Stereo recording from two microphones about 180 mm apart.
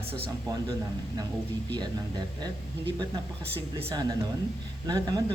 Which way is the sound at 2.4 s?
20° right (ahead or behind).